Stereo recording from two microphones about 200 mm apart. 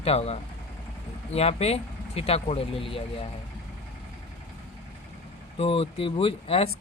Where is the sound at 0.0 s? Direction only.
30° left (ahead or behind).